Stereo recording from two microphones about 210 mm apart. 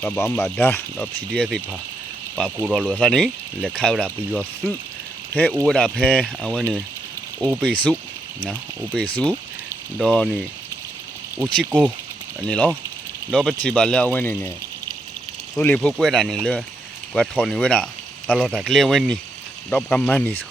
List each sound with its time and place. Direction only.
0.0 s speech: 5° left (ahead or behind)
5.3 s speech: 5° left (ahead or behind)
7.3 s speech: 10° right (ahead or behind)
7.6 s speech: 5° left (ahead or behind)
11.6 s speech: 5° right (ahead or behind)
12.5 s speech: 5° left (ahead or behind)
15.5 s speech: 5° left (ahead or behind)